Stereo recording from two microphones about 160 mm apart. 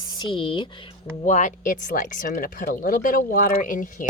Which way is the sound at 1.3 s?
50° left (ahead or behind).